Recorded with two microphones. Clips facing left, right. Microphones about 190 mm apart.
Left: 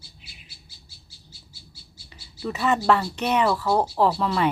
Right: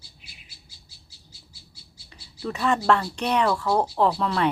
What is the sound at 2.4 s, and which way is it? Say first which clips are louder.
Speech: left 1 dB; 5° left (ahead or behind).